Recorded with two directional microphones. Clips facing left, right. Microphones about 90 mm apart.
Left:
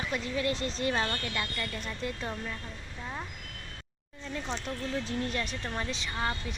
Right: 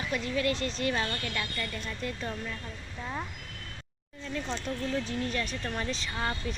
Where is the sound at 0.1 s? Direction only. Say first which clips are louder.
Right 3 dB; 25° left (ahead or behind).